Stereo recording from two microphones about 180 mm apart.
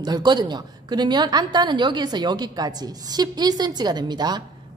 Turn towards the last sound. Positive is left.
turn(degrees=-25)  # may be behind; listen again after turning